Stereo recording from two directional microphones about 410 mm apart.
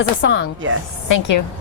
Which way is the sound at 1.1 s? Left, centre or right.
Left.